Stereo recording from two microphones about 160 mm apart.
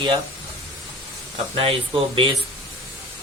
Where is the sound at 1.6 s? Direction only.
35° right (ahead or behind).